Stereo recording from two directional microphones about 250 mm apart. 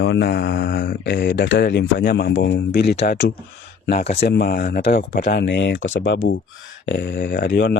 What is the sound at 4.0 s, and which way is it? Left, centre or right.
Speech, left.